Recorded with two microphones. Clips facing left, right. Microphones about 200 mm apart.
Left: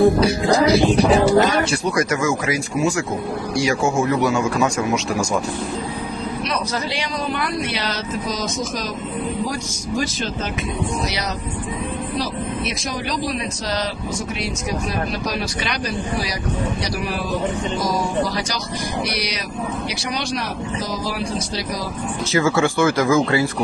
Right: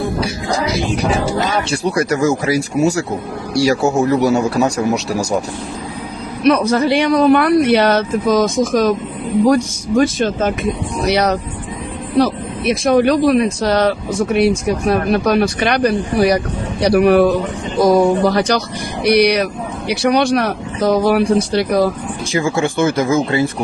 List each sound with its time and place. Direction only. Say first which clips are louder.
0.4 s speech: left 5 dB; 35° left (ahead or behind)
1.7 s speech: right 3 dB; 35° right (ahead or behind)
6.4 s speech: right 15 dB; 55° right (ahead or behind)
22.3 s speech: right 1 dB; 15° right (ahead or behind)